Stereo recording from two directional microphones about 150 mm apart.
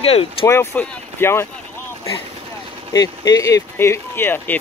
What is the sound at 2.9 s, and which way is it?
Speech, 25° left (ahead or behind).